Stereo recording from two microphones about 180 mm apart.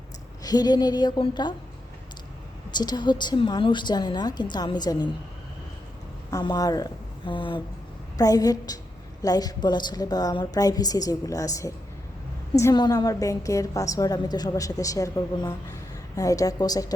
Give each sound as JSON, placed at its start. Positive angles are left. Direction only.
{"t": 0.4, "sound": "a woman's voice", "side_deg": 20}
{"t": 2.7, "sound": "a woman's voice", "side_deg": 25}
{"t": 6.3, "sound": "a woman's voice", "side_deg": 20}